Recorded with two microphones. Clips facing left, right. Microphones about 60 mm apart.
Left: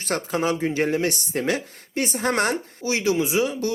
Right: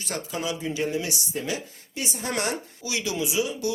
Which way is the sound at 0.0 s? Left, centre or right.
Left.